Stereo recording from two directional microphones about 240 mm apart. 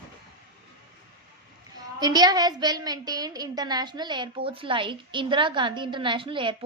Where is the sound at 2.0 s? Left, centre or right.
Centre.